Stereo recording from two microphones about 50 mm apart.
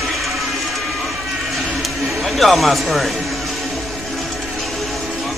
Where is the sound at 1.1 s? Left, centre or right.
Centre.